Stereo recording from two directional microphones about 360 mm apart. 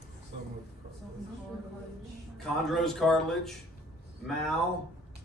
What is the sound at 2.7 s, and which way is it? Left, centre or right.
Speech, centre.